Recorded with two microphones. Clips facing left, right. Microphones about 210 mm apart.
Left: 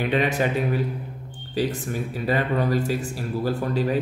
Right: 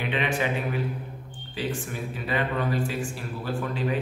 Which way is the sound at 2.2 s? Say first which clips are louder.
Left 4 dB; 40° left (ahead or behind).